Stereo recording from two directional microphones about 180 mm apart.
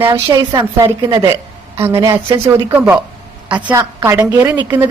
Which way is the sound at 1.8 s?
15° right (ahead or behind).